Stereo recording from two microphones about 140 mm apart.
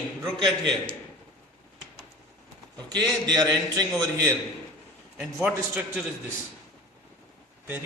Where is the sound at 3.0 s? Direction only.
30° right (ahead or behind).